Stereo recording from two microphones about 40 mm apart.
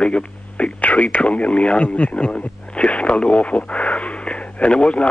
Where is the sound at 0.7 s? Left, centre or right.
Left.